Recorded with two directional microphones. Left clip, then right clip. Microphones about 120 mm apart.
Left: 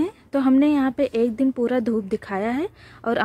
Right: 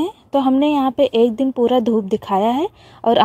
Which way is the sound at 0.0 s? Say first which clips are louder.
Right 5 dB; 15° right (ahead or behind).